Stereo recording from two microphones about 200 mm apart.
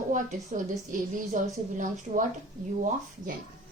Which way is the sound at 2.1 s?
45° right (ahead or behind).